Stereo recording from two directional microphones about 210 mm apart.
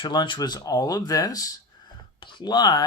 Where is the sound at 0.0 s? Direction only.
20° left (ahead or behind).